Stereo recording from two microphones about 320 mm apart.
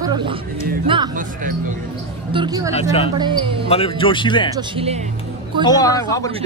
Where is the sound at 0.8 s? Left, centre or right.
Centre.